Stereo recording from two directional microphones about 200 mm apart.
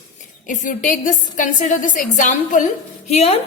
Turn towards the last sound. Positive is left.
turn(degrees=35)  # may be behind; listen again after turning